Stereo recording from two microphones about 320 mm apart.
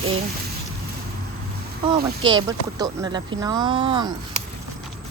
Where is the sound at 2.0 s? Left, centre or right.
Centre.